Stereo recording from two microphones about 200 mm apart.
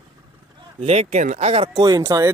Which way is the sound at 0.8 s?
30° right (ahead or behind).